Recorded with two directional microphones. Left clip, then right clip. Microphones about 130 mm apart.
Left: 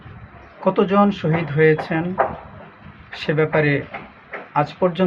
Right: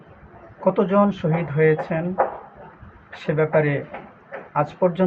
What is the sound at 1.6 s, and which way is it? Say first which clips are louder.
Speech: left 3 dB; 20° left (ahead or behind).